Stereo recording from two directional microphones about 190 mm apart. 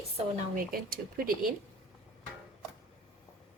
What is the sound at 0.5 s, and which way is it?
Speech, 50° right (ahead or behind).